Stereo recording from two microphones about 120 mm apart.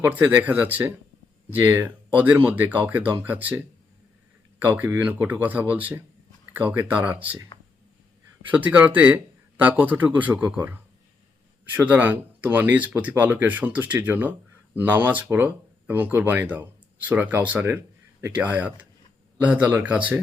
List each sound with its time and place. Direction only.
0.0 s speech: 15° right (ahead or behind)
4.6 s speech: 15° right (ahead or behind)
8.4 s speech: 15° right (ahead or behind)